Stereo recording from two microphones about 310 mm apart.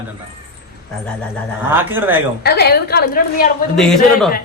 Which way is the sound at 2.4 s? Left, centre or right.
Left.